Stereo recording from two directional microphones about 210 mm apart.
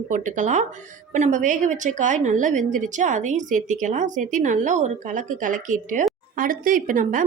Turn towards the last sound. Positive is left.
turn(degrees=-40)  # may be behind; listen again after turning